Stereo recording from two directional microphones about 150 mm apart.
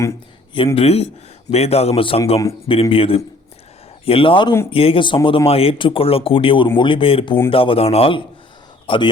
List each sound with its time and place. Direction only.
0.5 s speech: 35° left (ahead or behind)